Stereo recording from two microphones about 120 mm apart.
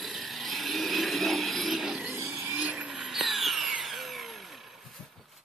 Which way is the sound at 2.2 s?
20° right (ahead or behind).